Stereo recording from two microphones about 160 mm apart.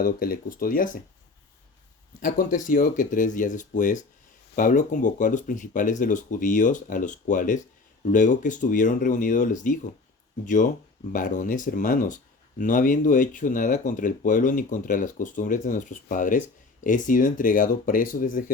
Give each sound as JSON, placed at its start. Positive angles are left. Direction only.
{"t": 0.0, "sound": "speech", "side_deg": 65}
{"t": 2.2, "sound": "speech", "side_deg": 55}